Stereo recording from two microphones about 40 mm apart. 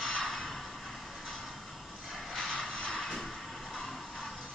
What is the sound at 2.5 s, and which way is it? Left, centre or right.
Vehicle, left.